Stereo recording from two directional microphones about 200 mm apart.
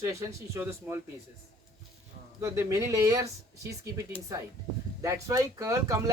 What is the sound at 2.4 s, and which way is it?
Speech, 15° right (ahead or behind).